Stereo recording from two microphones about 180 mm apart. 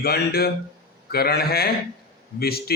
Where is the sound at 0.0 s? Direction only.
60° left (ahead or behind).